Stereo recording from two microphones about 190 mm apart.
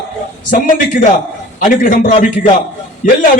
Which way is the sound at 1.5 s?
45° left (ahead or behind).